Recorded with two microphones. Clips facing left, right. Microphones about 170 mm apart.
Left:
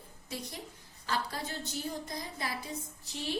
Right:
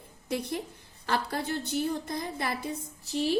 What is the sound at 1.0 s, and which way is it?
A woman's voice, 60° right (ahead or behind).